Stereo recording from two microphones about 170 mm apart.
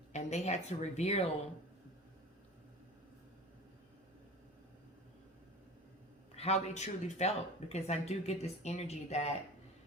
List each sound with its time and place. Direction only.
0.1 s speech: 40° left (ahead or behind)
6.3 s speech: 40° left (ahead or behind)